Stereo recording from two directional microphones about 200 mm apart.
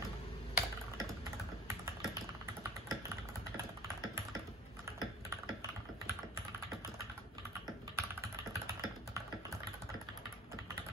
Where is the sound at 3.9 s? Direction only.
15° right (ahead or behind).